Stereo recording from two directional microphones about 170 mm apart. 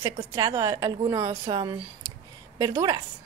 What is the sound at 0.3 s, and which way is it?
A woman's voice, 20° right (ahead or behind).